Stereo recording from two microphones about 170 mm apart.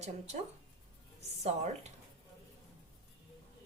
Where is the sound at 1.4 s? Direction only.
40° right (ahead or behind).